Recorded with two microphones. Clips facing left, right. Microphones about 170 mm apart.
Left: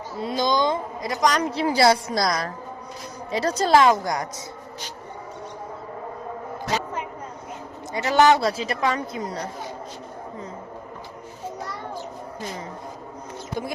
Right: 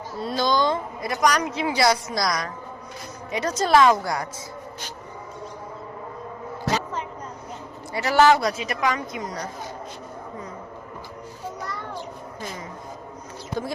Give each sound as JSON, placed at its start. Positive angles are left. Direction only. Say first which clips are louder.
{"t": 0.2, "sound": "a woman's voice", "louder": "even", "side_deg": 20}
{"t": 1.5, "sound": "a woman's voice", "louder": "left 3 dB", "side_deg": 35}
{"t": 7.9, "sound": "a woman's voice", "louder": "even", "side_deg": 20}